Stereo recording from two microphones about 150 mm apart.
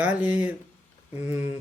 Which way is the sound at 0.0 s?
10° right (ahead or behind).